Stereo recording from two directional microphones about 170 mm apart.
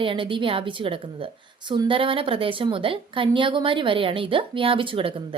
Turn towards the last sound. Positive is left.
turn(degrees=-30)  # may be behind; listen again after turning